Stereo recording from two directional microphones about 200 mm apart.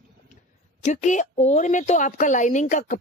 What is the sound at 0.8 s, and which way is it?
Speech, 35° left (ahead or behind).